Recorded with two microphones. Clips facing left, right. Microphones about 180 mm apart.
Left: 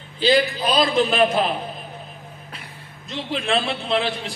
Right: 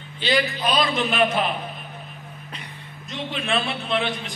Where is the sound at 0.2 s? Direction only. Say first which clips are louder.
Left 4 dB; 35° left (ahead or behind).